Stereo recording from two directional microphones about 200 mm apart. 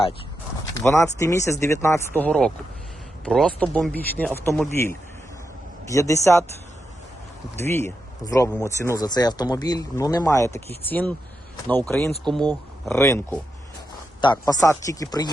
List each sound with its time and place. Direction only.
0.8 s speech: 15° left (ahead or behind)
5.9 s speech: 15° left (ahead or behind)
7.7 s speech: 10° left (ahead or behind)